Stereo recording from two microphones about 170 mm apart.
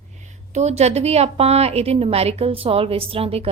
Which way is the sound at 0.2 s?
45° right (ahead or behind).